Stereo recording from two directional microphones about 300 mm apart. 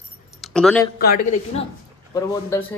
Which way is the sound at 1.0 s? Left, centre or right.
Left.